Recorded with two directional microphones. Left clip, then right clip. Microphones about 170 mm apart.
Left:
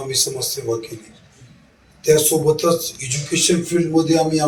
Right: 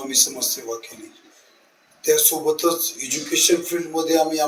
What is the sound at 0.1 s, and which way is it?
Speech, 15° right (ahead or behind).